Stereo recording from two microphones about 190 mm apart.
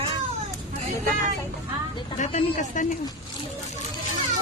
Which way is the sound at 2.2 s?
40° left (ahead or behind).